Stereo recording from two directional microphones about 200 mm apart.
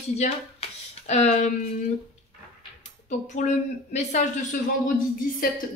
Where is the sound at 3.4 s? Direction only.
35° left (ahead or behind).